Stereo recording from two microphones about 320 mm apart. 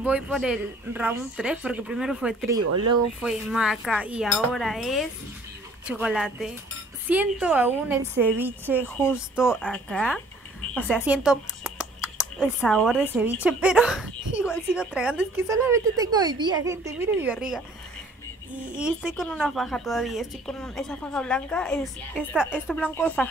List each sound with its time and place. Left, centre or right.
0.0 s a woman's voice: centre
2.6 s speech: right
3.2 s a woman's voice: centre
8.8 s a woman's voice: centre